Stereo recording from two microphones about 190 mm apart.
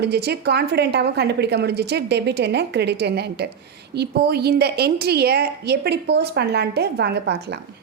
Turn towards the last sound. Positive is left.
turn(degrees=-60)  # may be behind; listen again after turning